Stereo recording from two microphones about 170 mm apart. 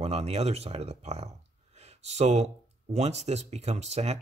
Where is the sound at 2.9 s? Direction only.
40° right (ahead or behind).